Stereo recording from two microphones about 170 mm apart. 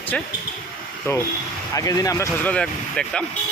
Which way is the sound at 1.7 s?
20° left (ahead or behind).